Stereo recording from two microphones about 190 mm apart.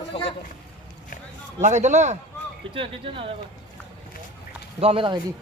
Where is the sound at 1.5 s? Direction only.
40° right (ahead or behind).